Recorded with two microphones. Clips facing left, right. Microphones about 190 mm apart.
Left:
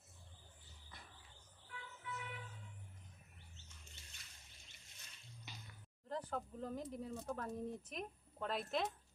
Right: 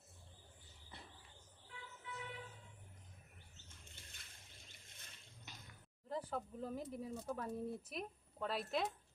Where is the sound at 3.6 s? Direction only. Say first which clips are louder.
Right 2 dB; 55° right (ahead or behind).